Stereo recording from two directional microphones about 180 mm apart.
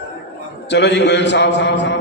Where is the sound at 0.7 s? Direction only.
70° left (ahead or behind).